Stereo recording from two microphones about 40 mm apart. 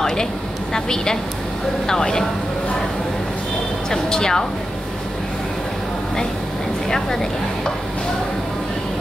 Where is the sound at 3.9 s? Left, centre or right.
Centre.